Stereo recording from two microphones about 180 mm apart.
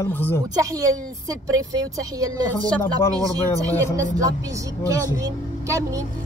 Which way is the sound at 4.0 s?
20° right (ahead or behind).